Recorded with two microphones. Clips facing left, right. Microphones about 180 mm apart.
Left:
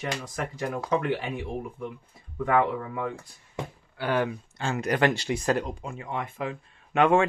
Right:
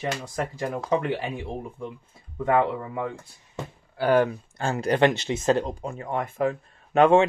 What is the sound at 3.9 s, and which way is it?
Speech, 40° right (ahead or behind).